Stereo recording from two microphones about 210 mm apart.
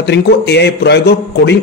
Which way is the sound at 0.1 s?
55° left (ahead or behind).